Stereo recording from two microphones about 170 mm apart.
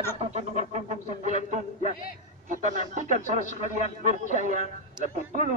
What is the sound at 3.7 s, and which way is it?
Speech, 45° right (ahead or behind).